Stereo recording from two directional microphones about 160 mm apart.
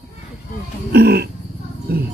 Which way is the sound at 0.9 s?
90° right.